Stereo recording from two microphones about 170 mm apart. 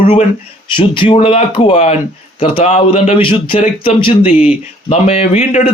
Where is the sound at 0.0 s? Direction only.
35° left (ahead or behind).